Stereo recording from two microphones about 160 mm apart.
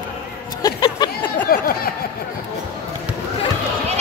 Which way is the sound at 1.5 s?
65° left (ahead or behind).